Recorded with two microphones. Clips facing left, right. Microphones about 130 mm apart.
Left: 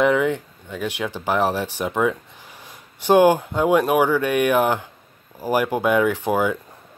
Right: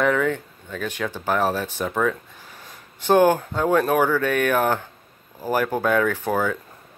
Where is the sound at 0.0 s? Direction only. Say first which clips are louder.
Left 2 dB; 15° left (ahead or behind).